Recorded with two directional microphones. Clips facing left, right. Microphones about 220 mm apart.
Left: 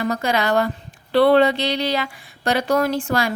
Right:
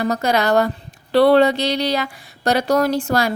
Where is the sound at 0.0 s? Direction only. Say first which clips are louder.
Right 3 dB; 40° right (ahead or behind).